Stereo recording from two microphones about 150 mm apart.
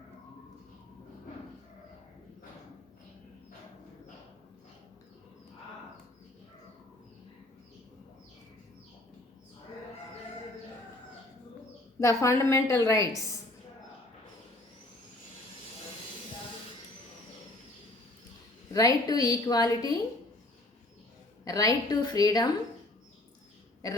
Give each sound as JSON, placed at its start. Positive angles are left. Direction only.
{"t": 11.9, "sound": "a woman's voice", "side_deg": 20}
{"t": 18.7, "sound": "a woman's voice", "side_deg": 25}
{"t": 21.4, "sound": "a woman's voice", "side_deg": 25}